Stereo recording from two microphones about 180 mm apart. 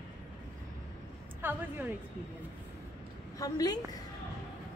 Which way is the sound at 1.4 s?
10° right (ahead or behind).